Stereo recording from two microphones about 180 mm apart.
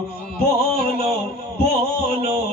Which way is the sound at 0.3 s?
60° left (ahead or behind).